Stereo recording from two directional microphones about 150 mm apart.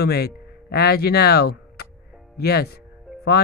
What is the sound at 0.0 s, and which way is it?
Speech, 90° left.